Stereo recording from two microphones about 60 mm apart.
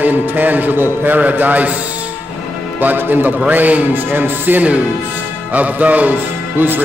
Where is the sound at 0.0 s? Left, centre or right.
Right.